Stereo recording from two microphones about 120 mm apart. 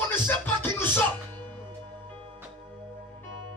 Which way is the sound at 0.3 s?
15° left (ahead or behind).